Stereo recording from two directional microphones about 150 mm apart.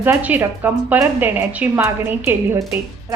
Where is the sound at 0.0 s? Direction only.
10° right (ahead or behind).